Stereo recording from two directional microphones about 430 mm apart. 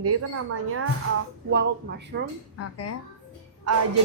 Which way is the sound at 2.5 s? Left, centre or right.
Left.